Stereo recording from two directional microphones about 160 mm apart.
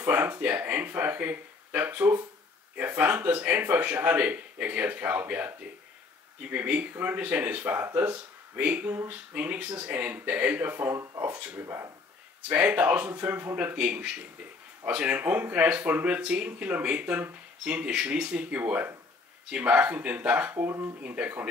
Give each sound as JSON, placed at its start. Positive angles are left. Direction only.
{"t": 0.0, "sound": "speech", "side_deg": -10}
{"t": 6.5, "sound": "speech", "side_deg": -10}